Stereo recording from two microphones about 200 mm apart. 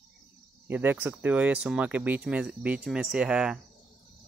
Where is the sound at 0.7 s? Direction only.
10° right (ahead or behind).